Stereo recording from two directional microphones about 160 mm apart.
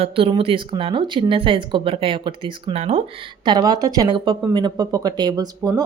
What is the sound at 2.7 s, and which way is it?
Speech, 45° right (ahead or behind).